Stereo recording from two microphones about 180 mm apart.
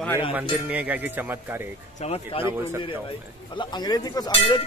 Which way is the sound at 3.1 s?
25° left (ahead or behind).